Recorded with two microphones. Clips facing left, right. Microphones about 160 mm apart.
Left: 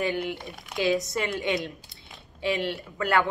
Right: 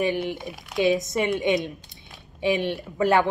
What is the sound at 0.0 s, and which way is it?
A woman's voice, 20° right (ahead or behind).